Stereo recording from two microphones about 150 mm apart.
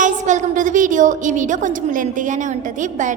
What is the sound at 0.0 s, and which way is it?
A woman's voice, 55° right (ahead or behind).